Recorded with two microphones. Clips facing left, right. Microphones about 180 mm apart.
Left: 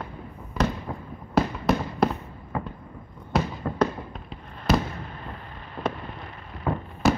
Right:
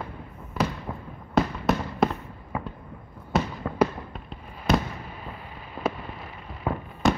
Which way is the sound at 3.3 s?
Centre (ahead or behind).